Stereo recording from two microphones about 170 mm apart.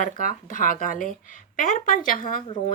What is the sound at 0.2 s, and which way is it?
Speech, 55° left (ahead or behind).